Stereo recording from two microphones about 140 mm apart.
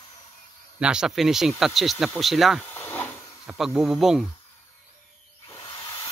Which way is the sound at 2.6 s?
15° left (ahead or behind).